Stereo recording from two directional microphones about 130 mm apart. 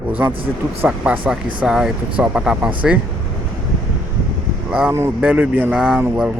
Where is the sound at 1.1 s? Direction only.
10° right (ahead or behind).